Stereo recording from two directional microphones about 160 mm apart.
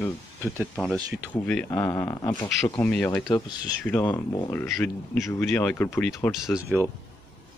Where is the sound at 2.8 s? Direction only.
10° left (ahead or behind).